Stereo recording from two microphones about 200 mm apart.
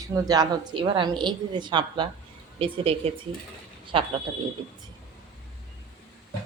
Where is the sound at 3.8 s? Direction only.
25° right (ahead or behind).